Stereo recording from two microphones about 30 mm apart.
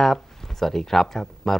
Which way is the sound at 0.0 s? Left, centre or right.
Centre.